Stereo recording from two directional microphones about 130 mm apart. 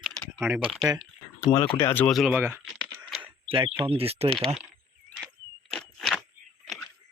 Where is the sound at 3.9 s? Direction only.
50° right (ahead or behind).